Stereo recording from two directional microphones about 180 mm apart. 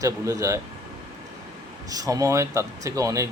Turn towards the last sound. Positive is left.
turn(degrees=-15)  # may be behind; listen again after turning